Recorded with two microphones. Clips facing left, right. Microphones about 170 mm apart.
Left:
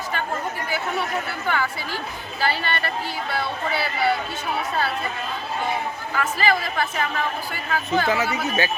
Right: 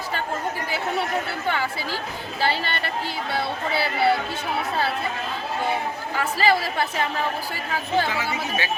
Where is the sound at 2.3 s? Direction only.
30° right (ahead or behind).